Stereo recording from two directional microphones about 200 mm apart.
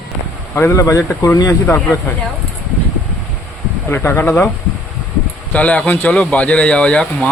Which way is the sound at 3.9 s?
10° left (ahead or behind).